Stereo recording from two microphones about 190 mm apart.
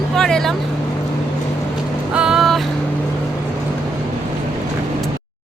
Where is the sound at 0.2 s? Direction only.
5° left (ahead or behind).